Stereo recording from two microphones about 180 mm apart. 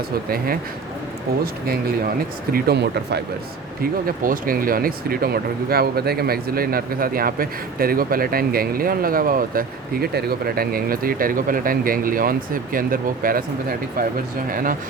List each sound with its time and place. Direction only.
1.6 s speech: 55° right (ahead or behind)
4.0 s speech: 50° right (ahead or behind)